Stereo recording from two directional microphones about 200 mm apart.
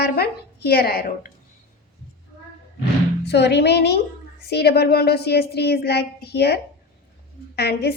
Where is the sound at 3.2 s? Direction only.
55° left (ahead or behind).